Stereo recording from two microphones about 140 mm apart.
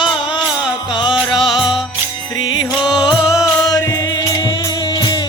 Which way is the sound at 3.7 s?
25° left (ahead or behind).